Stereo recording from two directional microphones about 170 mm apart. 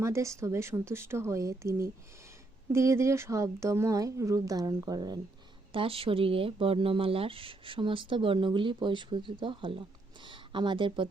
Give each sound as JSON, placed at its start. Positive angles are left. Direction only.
{"t": 0.0, "sound": "speech", "side_deg": -15}
{"t": 2.7, "sound": "speech", "side_deg": -15}